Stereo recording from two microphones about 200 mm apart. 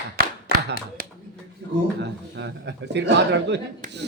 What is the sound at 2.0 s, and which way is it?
A man's voice, 60° right (ahead or behind).